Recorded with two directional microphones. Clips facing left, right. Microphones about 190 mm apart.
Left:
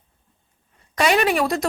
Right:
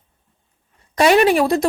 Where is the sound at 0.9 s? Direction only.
35° right (ahead or behind).